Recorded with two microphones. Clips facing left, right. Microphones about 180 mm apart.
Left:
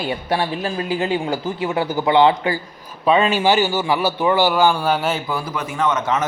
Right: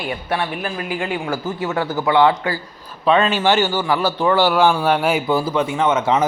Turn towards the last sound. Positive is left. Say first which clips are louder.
# right 3 dB
turn(degrees=-25)  # may be behind; listen again after turning